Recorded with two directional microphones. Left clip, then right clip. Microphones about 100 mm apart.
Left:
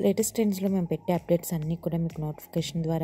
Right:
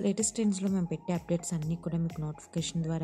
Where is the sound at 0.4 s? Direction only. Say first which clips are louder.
Left 5 dB; 40° left (ahead or behind).